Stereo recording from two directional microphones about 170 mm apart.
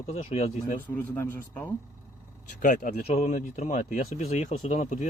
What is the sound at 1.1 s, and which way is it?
Speech, 15° left (ahead or behind).